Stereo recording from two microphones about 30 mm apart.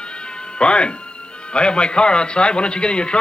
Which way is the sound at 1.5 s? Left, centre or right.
Left.